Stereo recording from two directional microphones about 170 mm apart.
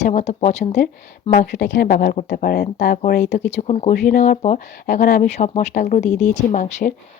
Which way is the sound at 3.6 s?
40° left (ahead or behind).